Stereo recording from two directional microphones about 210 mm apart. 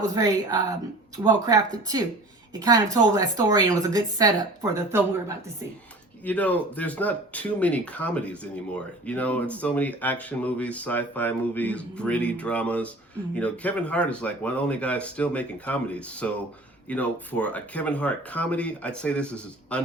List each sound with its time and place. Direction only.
0.0 s a woman's voice: 15° right (ahead or behind)
6.2 s speech: 5° left (ahead or behind)